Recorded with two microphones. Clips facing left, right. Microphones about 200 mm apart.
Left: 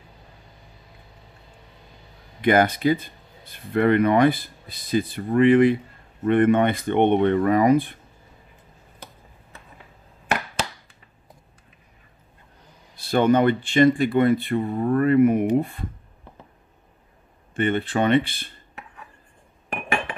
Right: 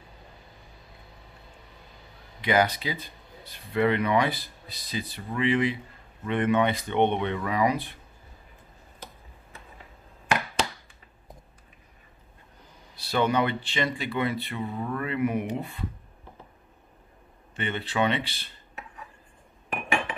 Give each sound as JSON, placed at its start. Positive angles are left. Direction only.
{"t": 2.4, "sound": "speech", "side_deg": 50}
{"t": 12.9, "sound": "speech", "side_deg": 50}
{"t": 17.6, "sound": "speech", "side_deg": 50}